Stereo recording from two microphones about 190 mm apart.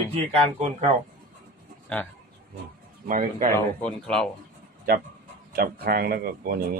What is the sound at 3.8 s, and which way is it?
Speech, 5° left (ahead or behind).